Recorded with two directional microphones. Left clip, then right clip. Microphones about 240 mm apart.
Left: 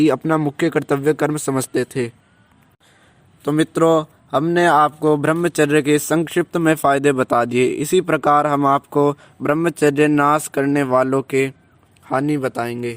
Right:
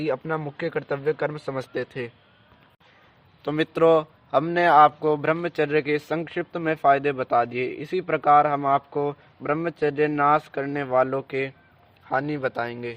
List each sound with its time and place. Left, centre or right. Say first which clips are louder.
0.0 s speech: left 10 dB; left
3.4 s a man's voice: left 4 dB; left